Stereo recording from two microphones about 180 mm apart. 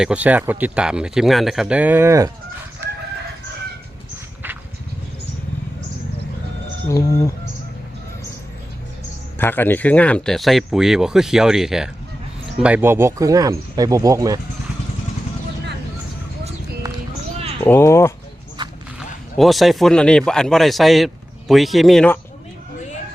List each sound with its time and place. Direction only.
0.0 s speech: 5° right (ahead or behind)
6.8 s speech: 20° left (ahead or behind)
9.4 s speech: 10° left (ahead or behind); by 14.3 s 20° right (ahead or behind)
17.6 s speech: 10° left (ahead or behind)
18.6 s a sound: 25° right (ahead or behind)
18.9 s speech: centre (ahead or behind)